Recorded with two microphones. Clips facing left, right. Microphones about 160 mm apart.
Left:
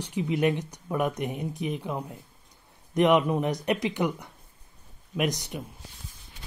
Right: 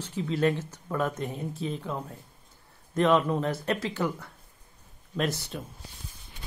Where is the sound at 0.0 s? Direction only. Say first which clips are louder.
Left 1 dB; 15° left (ahead or behind).